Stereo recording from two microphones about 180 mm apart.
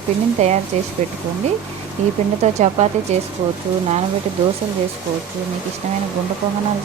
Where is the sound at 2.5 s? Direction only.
40° right (ahead or behind).